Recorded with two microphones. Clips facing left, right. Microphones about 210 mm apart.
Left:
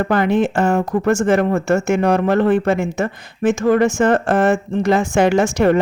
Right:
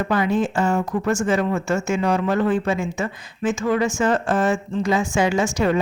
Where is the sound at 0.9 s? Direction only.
40° left (ahead or behind).